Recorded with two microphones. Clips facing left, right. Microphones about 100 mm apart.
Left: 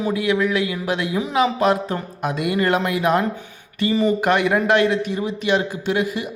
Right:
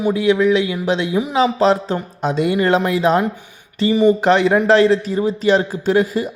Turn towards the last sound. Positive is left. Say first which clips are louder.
# right 5 dB
turn(degrees=-35)  # may be behind; listen again after turning